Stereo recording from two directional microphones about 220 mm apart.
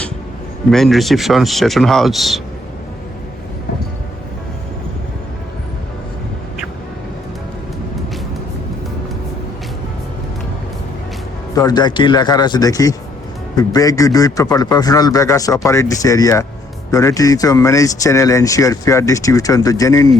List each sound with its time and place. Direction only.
0.7 s speech: centre (ahead or behind)
11.5 s speech: 20° left (ahead or behind)